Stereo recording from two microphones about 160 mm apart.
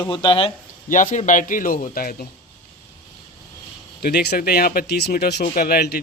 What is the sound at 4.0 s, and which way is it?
Speech, 85° left.